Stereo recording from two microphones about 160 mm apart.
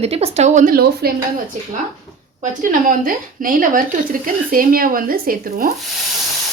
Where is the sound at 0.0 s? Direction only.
40° right (ahead or behind); by 1.1 s 70° right (ahead or behind).